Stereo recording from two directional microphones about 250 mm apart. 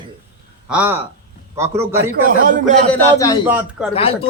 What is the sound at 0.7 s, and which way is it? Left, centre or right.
Speech, centre.